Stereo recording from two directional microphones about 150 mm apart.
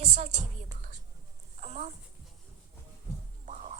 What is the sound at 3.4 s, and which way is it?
Music, 55° right (ahead or behind).